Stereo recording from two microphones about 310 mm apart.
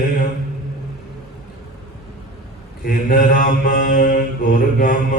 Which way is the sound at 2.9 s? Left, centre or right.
Left.